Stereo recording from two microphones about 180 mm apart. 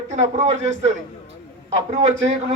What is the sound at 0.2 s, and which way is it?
Speech, 40° right (ahead or behind).